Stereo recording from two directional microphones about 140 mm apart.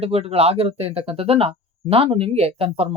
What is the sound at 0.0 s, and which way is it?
Speech, 45° right (ahead or behind).